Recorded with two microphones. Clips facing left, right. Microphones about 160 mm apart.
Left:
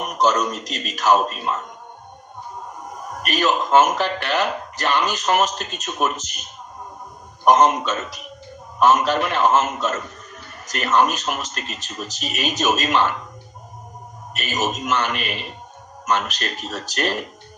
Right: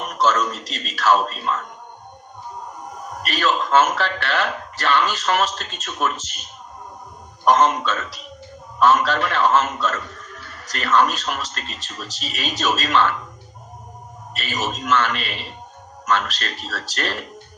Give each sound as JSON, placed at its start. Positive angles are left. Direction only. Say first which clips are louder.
{"t": 0.0, "sound": "a man's voice", "louder": "left 1 dB", "side_deg": 15}
{"t": 3.2, "sound": "a man's voice", "louder": "left 1 dB", "side_deg": 15}
{"t": 7.4, "sound": "a man's voice", "louder": "left 1 dB", "side_deg": 20}
{"t": 14.3, "sound": "a man's voice", "louder": "left 2 dB", "side_deg": 20}